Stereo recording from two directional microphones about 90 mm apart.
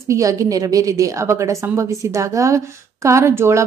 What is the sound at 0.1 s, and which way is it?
A woman's voice, 40° right (ahead or behind).